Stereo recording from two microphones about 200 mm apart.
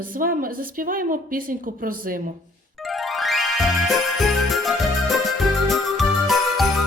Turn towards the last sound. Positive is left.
turn(degrees=0)  # may be behind; listen again after turning